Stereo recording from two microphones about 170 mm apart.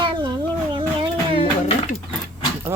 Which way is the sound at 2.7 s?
15° right (ahead or behind).